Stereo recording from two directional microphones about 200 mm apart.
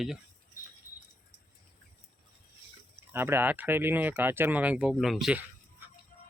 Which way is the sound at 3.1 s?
10° right (ahead or behind).